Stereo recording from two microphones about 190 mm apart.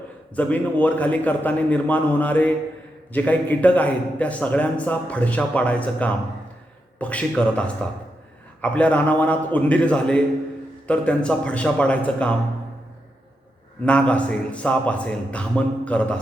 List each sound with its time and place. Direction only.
0.3 s a man's voice: 10° left (ahead or behind)
8.6 s a man's voice: 5° left (ahead or behind)
13.8 s a man's voice: 5° left (ahead or behind)